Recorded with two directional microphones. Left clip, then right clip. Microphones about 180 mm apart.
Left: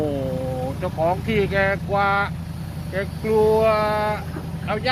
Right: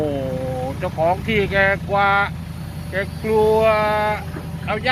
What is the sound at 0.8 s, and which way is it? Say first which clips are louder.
Speech: right 3 dB; centre (ahead or behind).